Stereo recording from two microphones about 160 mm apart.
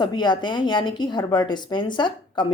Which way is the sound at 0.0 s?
30° left (ahead or behind).